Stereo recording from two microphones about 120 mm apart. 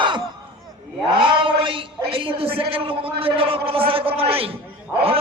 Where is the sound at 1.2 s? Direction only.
45° right (ahead or behind).